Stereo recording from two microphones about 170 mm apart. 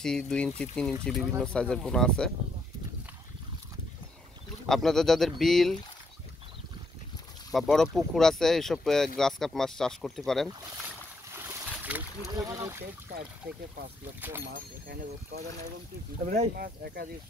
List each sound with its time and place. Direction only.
0.0 s speech: 5° left (ahead or behind)
4.6 s speech: centre (ahead or behind)
7.5 s speech: centre (ahead or behind)
11.3 s boat: 10° right (ahead or behind)
12.4 s speech: 20° right (ahead or behind)
16.5 s speech: 65° right (ahead or behind)